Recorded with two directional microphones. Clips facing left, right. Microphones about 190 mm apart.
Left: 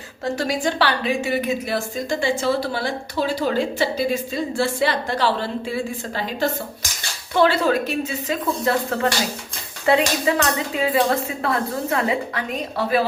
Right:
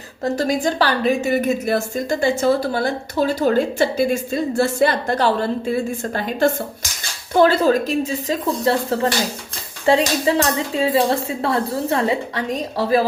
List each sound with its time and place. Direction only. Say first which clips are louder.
0.3 s a woman's voice: right 3 dB; 40° right (ahead or behind)